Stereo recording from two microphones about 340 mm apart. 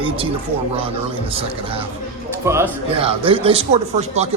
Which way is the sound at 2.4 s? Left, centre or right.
Centre.